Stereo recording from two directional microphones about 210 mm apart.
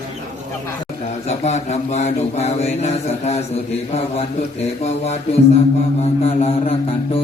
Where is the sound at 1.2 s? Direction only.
35° left (ahead or behind).